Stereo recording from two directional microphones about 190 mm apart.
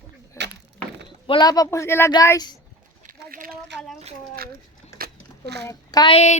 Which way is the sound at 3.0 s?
45° right (ahead or behind).